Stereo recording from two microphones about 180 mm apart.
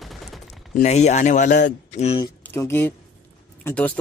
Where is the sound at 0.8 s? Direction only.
40° left (ahead or behind).